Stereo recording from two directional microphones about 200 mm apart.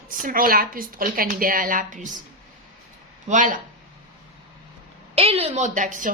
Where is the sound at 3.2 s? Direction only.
40° right (ahead or behind).